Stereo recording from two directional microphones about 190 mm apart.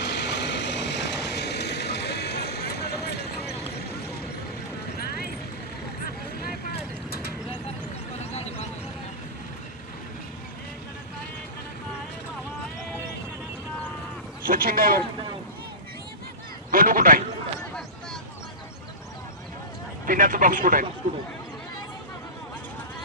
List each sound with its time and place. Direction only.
0.0 s vehicle: 65° left (ahead or behind)
3.7 s a sound: 55° left (ahead or behind)
4.9 s vehicle: 55° left (ahead or behind)
8.2 s vehicle: 35° left (ahead or behind)
14.4 s speech: 45° right (ahead or behind)
16.7 s a man's voice: 50° right (ahead or behind)
20.1 s speech: 45° right (ahead or behind)